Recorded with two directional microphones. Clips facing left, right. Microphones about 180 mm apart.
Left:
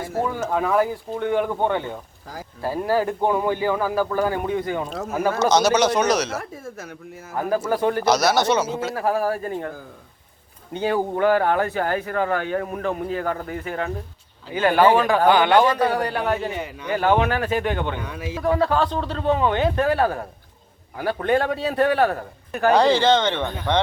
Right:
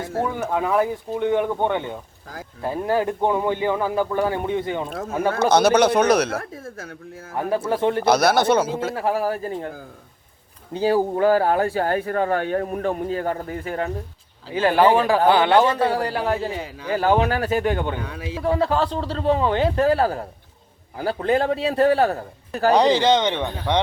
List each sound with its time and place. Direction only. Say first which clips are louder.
0.3 s a man's voice: left 1 dB; 15° right (ahead or behind)
5.4 s speech: right 2 dB; 55° right (ahead or behind)
7.3 s a man's voice: even; 30° right (ahead or behind)
8.0 s speech: right 3 dB; 55° right (ahead or behind)
9.0 s a man's voice: left 2 dB; 25° right (ahead or behind)
10.8 s a man's voice: right 2 dB; 35° right (ahead or behind)
22.7 s speech: even; 15° right (ahead or behind)